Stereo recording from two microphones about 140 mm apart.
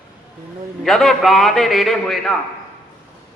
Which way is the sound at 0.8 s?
Centre (ahead or behind).